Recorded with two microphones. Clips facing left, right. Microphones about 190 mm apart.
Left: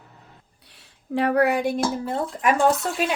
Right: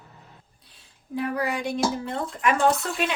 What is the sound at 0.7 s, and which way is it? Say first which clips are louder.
Speech: left 5 dB; 70° left (ahead or behind).